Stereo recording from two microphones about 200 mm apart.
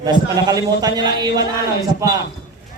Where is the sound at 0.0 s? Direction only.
20° right (ahead or behind).